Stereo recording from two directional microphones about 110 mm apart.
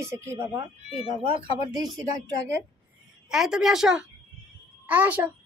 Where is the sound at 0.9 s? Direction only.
45° right (ahead or behind).